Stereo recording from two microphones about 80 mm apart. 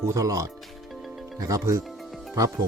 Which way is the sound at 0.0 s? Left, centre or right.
Right.